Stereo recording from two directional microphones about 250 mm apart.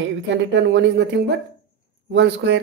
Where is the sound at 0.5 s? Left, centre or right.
Right.